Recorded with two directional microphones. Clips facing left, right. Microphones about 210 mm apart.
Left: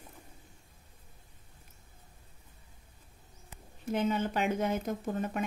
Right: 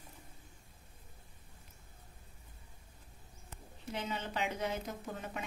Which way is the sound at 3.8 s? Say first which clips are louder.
Left 10 dB; 50° left (ahead or behind).